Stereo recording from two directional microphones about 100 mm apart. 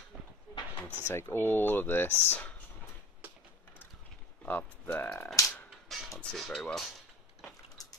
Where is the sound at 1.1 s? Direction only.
25° left (ahead or behind).